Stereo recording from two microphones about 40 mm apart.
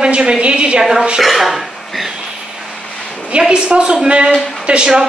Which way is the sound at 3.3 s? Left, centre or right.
Right.